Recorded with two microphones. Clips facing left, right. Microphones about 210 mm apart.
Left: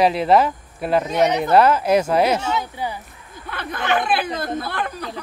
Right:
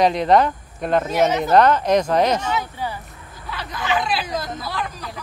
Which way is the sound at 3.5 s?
55° left (ahead or behind).